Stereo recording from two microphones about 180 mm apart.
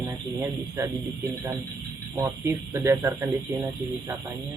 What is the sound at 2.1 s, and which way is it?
Speech, 15° right (ahead or behind).